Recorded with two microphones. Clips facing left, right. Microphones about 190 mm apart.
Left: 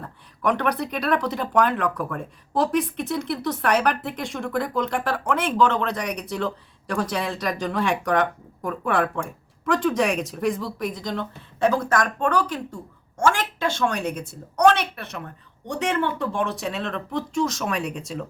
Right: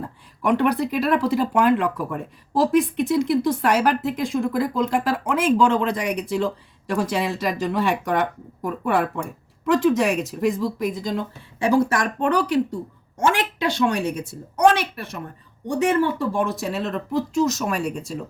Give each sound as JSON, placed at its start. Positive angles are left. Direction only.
{"t": 0.0, "sound": "speech", "side_deg": -10}
{"t": 13.1, "sound": "speech", "side_deg": -15}
{"t": 14.0, "sound": "speech", "side_deg": 55}
{"t": 15.7, "sound": "speech", "side_deg": -10}